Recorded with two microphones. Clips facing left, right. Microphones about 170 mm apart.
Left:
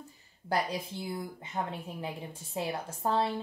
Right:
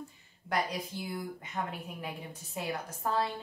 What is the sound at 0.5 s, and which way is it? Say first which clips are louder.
A woman's voice: left 2 dB; 30° left (ahead or behind).